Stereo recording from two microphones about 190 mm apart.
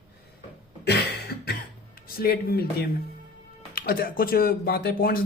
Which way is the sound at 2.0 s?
50° left (ahead or behind).